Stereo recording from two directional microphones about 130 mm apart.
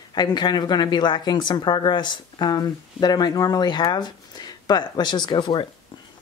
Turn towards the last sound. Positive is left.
turn(degrees=35)  # may be behind; listen again after turning